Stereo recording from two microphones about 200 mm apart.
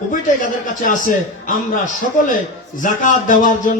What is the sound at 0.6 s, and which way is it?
A man's voice, 40° left (ahead or behind).